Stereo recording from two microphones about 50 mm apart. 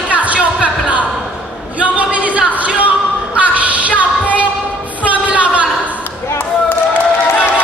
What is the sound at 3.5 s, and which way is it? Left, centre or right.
Music, right.